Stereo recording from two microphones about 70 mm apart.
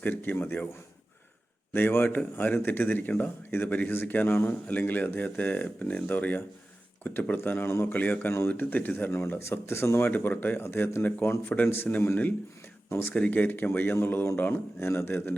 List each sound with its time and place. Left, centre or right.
0.0 s speech: left
1.7 s a man's voice: left
10.1 s a man's voice: left